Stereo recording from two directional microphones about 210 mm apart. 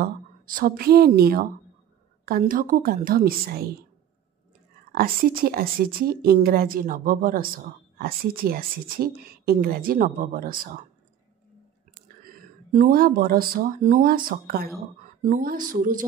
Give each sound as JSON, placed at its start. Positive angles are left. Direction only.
{"t": 0.0, "sound": "a woman's voice", "side_deg": -40}
{"t": 4.9, "sound": "a woman's voice", "side_deg": -45}
{"t": 12.3, "sound": "a woman's voice", "side_deg": -40}